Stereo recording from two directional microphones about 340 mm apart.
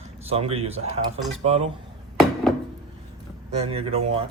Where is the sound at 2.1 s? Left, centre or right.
Centre.